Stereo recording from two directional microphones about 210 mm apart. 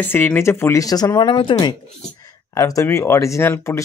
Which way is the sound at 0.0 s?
10° left (ahead or behind).